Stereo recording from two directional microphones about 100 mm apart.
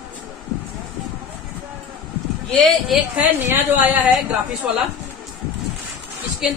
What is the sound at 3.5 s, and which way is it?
Speech, 20° right (ahead or behind).